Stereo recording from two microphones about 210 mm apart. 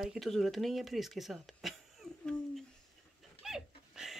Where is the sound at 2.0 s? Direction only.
5° left (ahead or behind).